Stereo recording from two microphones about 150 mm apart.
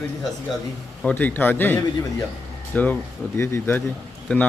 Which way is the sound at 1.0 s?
15° left (ahead or behind).